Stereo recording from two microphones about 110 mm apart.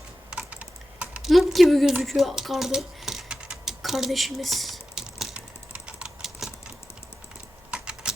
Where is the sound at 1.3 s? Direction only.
Centre (ahead or behind).